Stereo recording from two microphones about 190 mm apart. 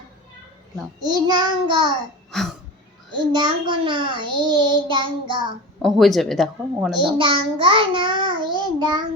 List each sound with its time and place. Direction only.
1.0 s a child's voice: 20° right (ahead or behind)
2.3 s a sound: centre (ahead or behind)
3.3 s a child's voice: 25° right (ahead or behind)
5.8 s speech: centre (ahead or behind)
6.9 s a child's voice: 25° right (ahead or behind)